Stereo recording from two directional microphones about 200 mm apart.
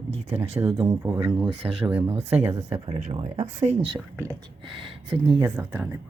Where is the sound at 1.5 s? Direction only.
30° right (ahead or behind).